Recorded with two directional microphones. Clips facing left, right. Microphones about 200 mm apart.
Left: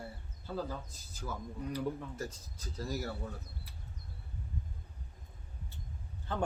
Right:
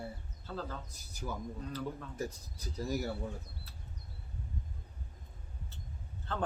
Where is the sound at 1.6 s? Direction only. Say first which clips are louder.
Left 6 dB; 15° left (ahead or behind).